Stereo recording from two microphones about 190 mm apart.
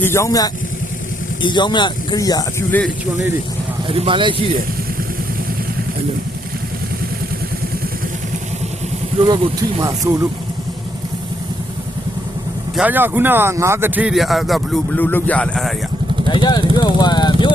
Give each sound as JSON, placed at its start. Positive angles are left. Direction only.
{"t": 0.0, "sound": "speech", "side_deg": 15}
{"t": 3.8, "sound": "speech", "side_deg": -30}
{"t": 9.2, "sound": "speech", "side_deg": -25}
{"t": 12.7, "sound": "speech", "side_deg": -10}
{"t": 16.3, "sound": "vehicle", "side_deg": 25}